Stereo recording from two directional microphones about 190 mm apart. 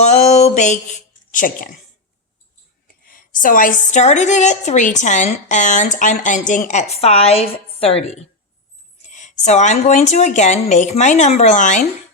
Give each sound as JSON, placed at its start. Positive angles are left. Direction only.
{"t": 0.0, "sound": "speech", "side_deg": 35}
{"t": 2.8, "sound": "a woman's voice", "side_deg": 50}